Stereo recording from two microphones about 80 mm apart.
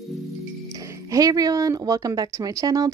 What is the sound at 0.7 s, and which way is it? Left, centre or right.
A woman's voice, right.